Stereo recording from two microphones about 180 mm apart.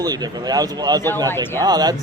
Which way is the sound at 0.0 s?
20° right (ahead or behind).